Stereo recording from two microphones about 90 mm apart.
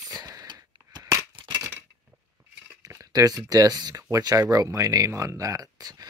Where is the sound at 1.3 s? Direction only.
55° right (ahead or behind).